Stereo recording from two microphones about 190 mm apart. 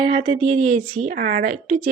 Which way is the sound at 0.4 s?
40° right (ahead or behind).